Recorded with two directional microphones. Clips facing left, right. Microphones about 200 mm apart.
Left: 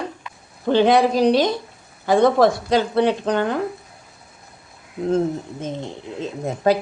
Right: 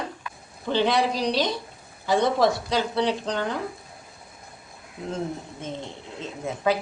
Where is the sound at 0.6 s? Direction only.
50° left (ahead or behind).